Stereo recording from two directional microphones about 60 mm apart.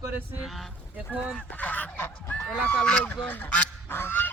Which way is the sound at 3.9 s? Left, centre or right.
Left.